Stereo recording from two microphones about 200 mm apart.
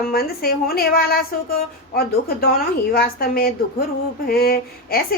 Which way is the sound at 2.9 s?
50° left (ahead or behind).